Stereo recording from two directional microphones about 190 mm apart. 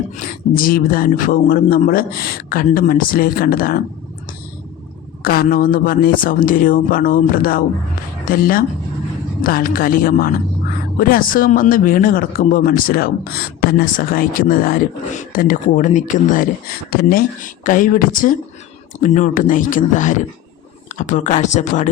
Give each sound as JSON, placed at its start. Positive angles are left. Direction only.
{"t": 0.5, "sound": "speech", "side_deg": 50}
{"t": 5.2, "sound": "a woman's voice", "side_deg": 50}